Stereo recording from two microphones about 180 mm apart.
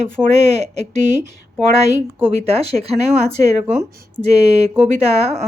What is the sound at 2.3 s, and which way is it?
Speech, 35° right (ahead or behind).